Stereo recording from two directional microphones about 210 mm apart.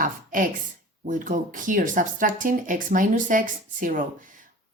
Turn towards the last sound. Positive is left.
turn(degrees=-40)  # may be behind; listen again after turning